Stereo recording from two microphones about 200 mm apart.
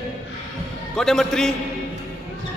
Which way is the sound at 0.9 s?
Centre (ahead or behind).